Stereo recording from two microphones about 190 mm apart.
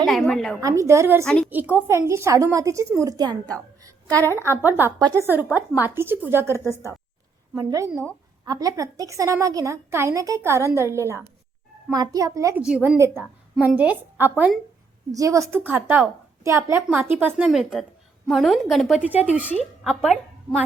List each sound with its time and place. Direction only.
0.0 s a woman's voice: centre (ahead or behind)
0.6 s a woman's voice: 15° right (ahead or behind)
3.8 s a sound: 15° right (ahead or behind)
4.4 s a woman's voice: 15° right (ahead or behind)
12.6 s a woman's voice: 5° right (ahead or behind)